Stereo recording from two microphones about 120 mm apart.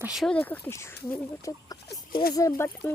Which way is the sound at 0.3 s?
15° left (ahead or behind).